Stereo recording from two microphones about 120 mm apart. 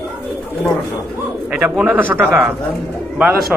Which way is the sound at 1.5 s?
10° right (ahead or behind).